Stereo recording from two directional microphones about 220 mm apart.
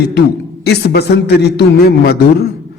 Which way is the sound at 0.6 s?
50° left (ahead or behind).